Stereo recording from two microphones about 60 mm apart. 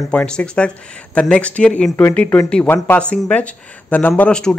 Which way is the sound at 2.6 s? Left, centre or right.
Left.